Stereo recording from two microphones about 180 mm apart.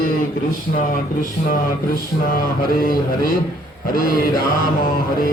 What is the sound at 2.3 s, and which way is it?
Speech, 55° left (ahead or behind).